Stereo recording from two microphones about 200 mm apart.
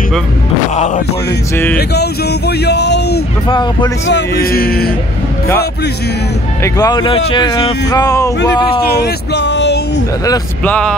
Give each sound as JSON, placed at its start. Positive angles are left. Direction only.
{"t": 0.7, "sound": "music", "side_deg": 35}
{"t": 1.8, "sound": "speech", "side_deg": 55}
{"t": 3.4, "sound": "speech", "side_deg": 20}
{"t": 4.1, "sound": "speech", "side_deg": 50}
{"t": 6.6, "sound": "speech", "side_deg": 20}
{"t": 8.8, "sound": "speech", "side_deg": 55}
{"t": 10.6, "sound": "speech", "side_deg": 5}